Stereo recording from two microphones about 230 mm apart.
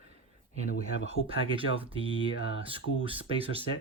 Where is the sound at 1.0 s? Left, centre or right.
Right.